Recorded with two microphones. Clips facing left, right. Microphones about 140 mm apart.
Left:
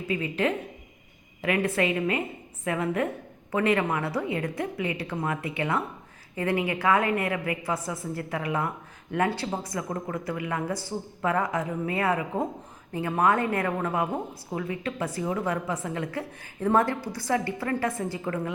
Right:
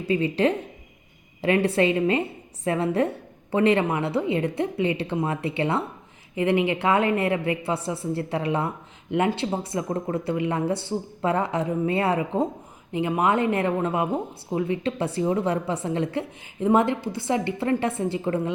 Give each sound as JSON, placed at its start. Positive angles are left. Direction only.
{"t": 0.1, "sound": "a woman's voice", "side_deg": -30}